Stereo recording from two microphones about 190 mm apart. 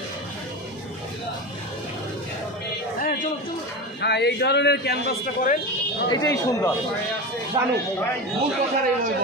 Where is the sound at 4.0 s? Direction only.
65° left (ahead or behind).